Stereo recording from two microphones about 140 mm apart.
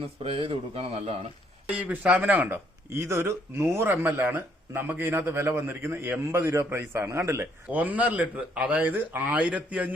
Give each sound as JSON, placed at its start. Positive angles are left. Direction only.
{"t": 0.0, "sound": "speech", "side_deg": -40}
{"t": 1.7, "sound": "speech", "side_deg": -10}